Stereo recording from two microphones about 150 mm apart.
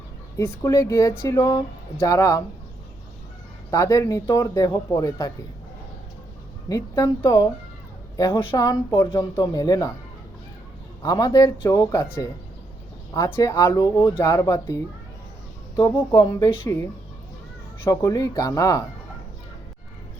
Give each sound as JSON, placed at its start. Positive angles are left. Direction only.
{"t": 0.3, "sound": "speech", "side_deg": 20}
{"t": 3.7, "sound": "speech", "side_deg": 20}
{"t": 6.7, "sound": "a woman's voice", "side_deg": 20}
{"t": 11.0, "sound": "speech", "side_deg": 25}
{"t": 14.2, "sound": "speech", "side_deg": 20}
{"t": 15.8, "sound": "speech", "side_deg": 25}